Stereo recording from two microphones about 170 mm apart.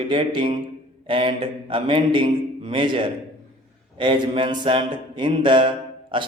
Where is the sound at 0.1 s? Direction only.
30° right (ahead or behind).